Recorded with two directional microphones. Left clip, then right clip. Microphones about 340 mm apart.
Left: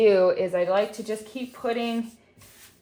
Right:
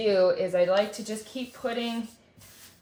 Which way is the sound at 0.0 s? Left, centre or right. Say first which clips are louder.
Left 4 dB; centre.